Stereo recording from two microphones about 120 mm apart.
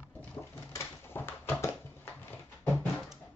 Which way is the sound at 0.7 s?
20° left (ahead or behind).